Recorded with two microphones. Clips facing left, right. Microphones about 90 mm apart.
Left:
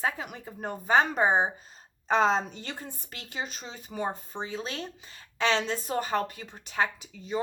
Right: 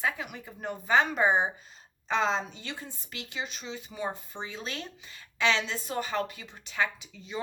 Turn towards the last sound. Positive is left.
turn(degrees=40)  # may be behind; listen again after turning